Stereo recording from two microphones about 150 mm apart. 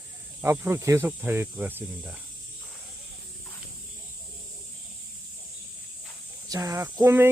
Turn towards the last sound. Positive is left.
turn(degrees=-15)  # may be behind; listen again after turning